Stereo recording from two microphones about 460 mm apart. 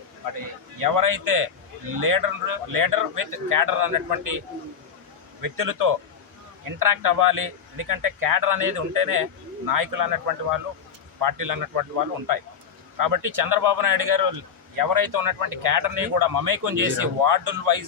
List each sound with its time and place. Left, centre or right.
0.8 s speech: right